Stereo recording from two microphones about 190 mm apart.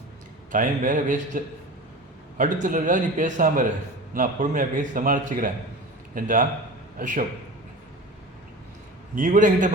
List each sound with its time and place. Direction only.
0.5 s a man's voice: 45° right (ahead or behind)
2.4 s a man's voice: 45° right (ahead or behind)
9.1 s a man's voice: 45° right (ahead or behind)